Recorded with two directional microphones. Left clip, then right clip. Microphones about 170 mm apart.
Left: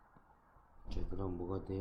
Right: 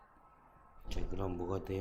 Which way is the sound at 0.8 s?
15° left (ahead or behind).